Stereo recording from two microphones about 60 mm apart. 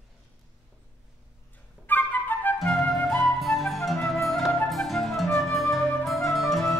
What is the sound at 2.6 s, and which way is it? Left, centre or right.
Flute, centre.